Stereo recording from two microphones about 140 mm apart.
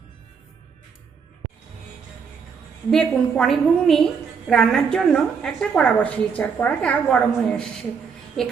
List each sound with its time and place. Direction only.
2.9 s a woman's voice: 5° left (ahead or behind)